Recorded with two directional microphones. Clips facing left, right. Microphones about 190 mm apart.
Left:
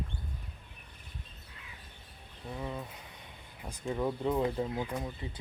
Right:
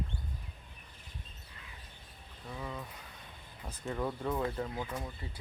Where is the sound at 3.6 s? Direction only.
15° left (ahead or behind).